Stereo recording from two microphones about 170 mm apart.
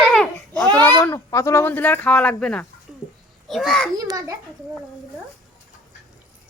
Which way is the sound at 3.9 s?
20° right (ahead or behind).